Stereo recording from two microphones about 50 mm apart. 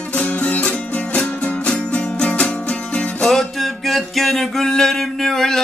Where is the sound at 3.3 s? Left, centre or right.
Centre.